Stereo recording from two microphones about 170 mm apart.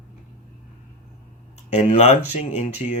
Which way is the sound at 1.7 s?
40° left (ahead or behind).